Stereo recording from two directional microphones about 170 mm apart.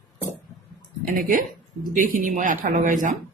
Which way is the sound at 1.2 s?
50° right (ahead or behind).